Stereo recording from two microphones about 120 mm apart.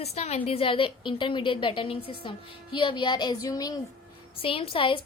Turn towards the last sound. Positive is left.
turn(degrees=45)  # may be behind; listen again after turning